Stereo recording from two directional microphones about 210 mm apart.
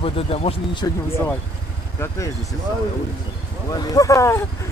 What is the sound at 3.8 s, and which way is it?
Speech, 15° left (ahead or behind).